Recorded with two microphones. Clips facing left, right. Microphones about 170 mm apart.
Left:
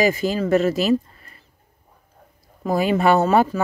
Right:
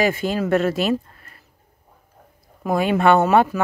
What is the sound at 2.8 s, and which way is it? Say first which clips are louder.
Speech: right 1 dB; 5° left (ahead or behind).